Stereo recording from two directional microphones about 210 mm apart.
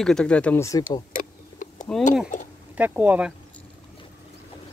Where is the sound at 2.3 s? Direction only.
35° left (ahead or behind).